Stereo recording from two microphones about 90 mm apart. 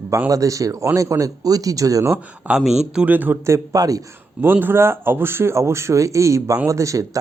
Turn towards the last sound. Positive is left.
turn(degrees=-40)  # may be behind; listen again after turning